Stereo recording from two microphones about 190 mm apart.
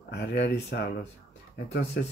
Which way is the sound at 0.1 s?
65° left (ahead or behind).